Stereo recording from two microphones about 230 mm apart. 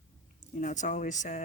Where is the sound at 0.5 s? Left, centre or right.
Left.